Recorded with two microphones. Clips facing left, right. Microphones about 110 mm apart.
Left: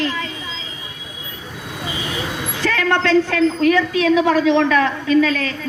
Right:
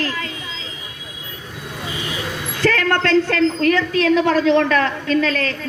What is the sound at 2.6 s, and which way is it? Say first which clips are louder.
A man's voice: right 1 dB; 50° right (ahead or behind).